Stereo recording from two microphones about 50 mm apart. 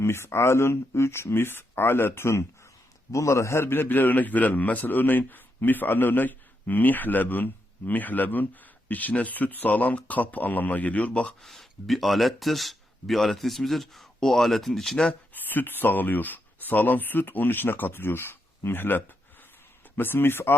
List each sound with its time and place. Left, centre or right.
0.0 s speech: left
3.1 s a man's voice: left
3.6 s a man's voice: left
11.4 s speech: centre
15.3 s speech: left